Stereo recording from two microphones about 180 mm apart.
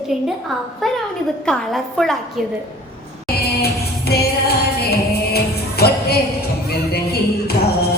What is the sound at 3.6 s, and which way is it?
Music, 60° left (ahead or behind).